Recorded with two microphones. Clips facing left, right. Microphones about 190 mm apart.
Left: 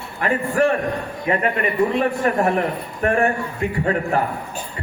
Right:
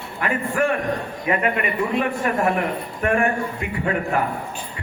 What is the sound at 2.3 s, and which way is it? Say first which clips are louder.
Speech: left 2 dB; 35° left (ahead or behind).